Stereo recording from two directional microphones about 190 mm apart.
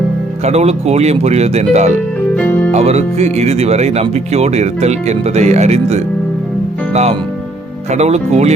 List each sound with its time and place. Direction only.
0.4 s speech: 35° right (ahead or behind)
2.3 s music: 5° left (ahead or behind)
2.7 s speech: 35° right (ahead or behind)